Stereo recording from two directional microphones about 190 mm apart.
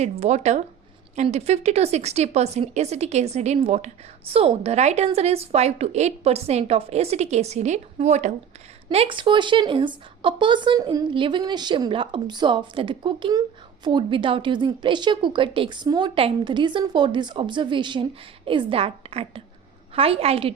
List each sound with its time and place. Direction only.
0.0 s a woman's voice: 35° right (ahead or behind)